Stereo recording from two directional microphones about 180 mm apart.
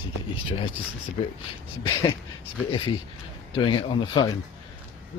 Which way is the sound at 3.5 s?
30° left (ahead or behind).